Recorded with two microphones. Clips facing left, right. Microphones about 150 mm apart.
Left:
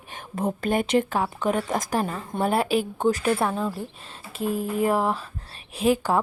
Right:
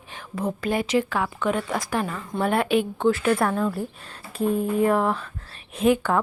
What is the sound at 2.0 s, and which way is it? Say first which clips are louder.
Speech: even; 25° left (ahead or behind).